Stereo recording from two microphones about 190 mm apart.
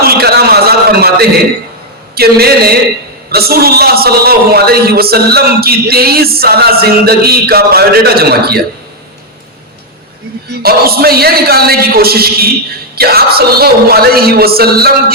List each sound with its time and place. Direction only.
0.0 s a sound: 55° right (ahead or behind)
2.1 s a man's voice: 55° right (ahead or behind)
10.6 s a man's voice: 55° right (ahead or behind)